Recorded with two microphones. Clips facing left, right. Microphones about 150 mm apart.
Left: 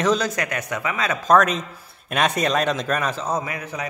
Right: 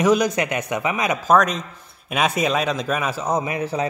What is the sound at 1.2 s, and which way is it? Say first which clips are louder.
A man's voice: left 1 dB; centre (ahead or behind).